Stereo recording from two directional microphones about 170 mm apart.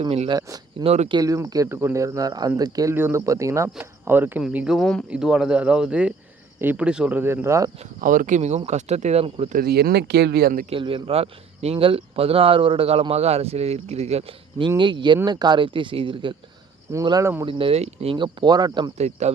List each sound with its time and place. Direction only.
0.0 s speech: 30° right (ahead or behind)
0.3 s speech: 20° right (ahead or behind)
0.9 s speech: 35° right (ahead or behind)
1.2 s speech: 20° right (ahead or behind)
7.8 s speech: 50° right (ahead or behind)
9.6 s speech: 65° right (ahead or behind)
10.7 s speech: 30° right (ahead or behind)
17.4 s speech: 30° right (ahead or behind)
18.9 s speech: 40° right (ahead or behind)